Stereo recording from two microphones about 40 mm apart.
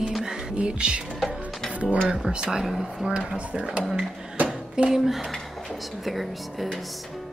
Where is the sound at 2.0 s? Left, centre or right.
Right.